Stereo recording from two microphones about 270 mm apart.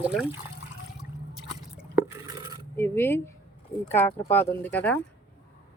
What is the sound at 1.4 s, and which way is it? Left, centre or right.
Drip, centre.